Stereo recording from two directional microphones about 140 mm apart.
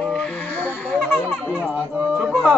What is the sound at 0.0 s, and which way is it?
Music, 5° left (ahead or behind).